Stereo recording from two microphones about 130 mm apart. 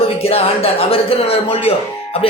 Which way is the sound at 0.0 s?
50° left (ahead or behind).